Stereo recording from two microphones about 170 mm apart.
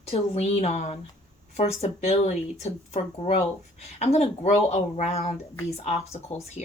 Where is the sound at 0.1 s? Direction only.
40° left (ahead or behind).